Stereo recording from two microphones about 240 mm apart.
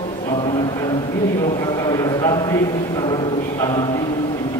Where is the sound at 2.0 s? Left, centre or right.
Centre.